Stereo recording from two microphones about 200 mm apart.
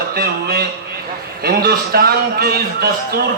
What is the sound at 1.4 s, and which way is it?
A man's voice, 50° right (ahead or behind).